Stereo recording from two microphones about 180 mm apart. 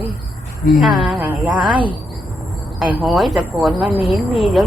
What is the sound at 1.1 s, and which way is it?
Speech, 10° right (ahead or behind).